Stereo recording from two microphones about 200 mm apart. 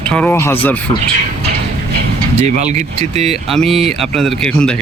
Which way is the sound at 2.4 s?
35° right (ahead or behind).